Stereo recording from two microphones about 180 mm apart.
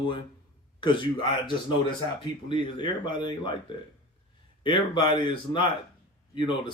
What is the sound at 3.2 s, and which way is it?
Speech, 25° left (ahead or behind).